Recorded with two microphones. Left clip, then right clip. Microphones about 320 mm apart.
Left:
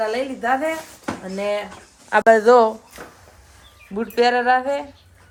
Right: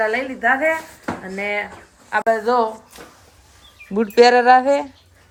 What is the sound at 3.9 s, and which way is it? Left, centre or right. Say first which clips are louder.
Speech: right 6 dB; centre.